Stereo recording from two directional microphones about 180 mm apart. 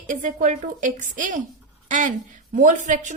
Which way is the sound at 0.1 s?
45° right (ahead or behind).